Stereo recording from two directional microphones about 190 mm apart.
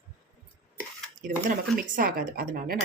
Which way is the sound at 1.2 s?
45° right (ahead or behind).